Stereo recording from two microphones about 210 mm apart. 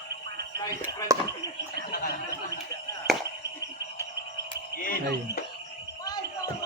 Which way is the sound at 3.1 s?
Centre (ahead or behind).